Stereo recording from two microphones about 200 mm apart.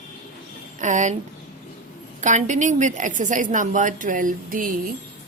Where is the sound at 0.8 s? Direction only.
40° right (ahead or behind).